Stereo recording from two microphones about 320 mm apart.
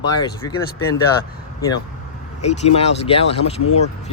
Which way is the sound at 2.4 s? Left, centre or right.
Centre.